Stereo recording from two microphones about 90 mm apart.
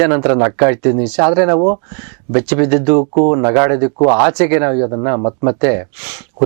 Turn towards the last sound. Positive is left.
turn(degrees=-15)  # may be behind; listen again after turning